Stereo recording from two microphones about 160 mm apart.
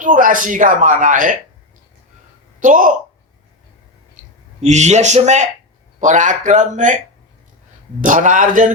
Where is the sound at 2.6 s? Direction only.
55° right (ahead or behind).